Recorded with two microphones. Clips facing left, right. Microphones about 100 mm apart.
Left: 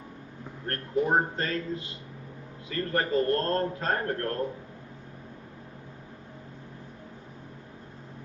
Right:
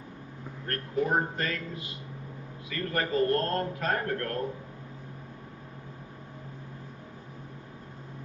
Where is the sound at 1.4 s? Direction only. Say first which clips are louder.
Left 3 dB; 30° left (ahead or behind).